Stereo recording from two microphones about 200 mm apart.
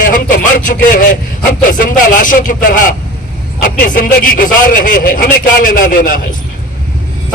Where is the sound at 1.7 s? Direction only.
40° left (ahead or behind).